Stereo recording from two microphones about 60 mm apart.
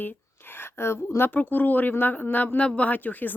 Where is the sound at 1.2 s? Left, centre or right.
Left.